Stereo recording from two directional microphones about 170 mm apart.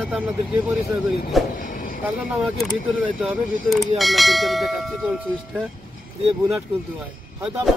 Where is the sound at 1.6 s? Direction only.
55° left (ahead or behind).